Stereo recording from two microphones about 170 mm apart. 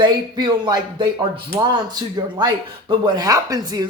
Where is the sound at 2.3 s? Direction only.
25° right (ahead or behind).